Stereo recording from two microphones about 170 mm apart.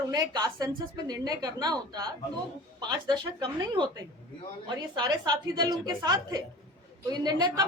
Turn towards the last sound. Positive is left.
turn(degrees=-25)  # may be behind; listen again after turning